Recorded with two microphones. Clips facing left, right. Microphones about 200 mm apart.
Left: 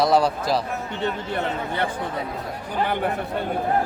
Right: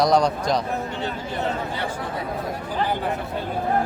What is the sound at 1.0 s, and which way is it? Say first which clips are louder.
Speech: left 5 dB; 60° left (ahead or behind).